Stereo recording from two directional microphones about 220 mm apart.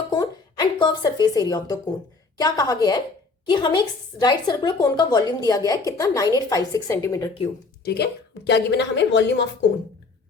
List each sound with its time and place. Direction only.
0.1 s a sound: 20° left (ahead or behind)
2.4 s a woman's voice: 15° left (ahead or behind)
7.9 s a woman's voice: 50° left (ahead or behind)